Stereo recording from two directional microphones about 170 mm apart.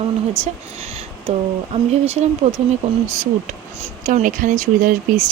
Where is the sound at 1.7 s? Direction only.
40° right (ahead or behind).